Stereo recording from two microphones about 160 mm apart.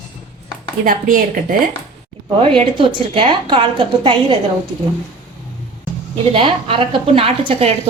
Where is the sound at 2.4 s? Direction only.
35° right (ahead or behind).